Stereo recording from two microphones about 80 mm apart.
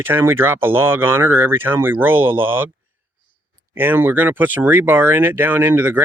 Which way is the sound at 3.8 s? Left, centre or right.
Right.